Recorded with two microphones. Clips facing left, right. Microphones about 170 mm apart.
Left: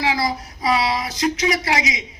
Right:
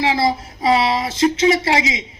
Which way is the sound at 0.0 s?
25° right (ahead or behind).